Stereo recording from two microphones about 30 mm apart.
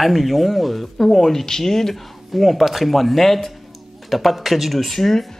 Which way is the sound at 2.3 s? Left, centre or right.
Centre.